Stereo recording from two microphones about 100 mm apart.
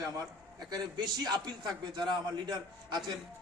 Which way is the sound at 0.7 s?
45° right (ahead or behind).